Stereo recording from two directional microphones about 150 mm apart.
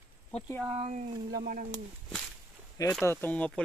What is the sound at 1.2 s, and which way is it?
Speech, 80° right.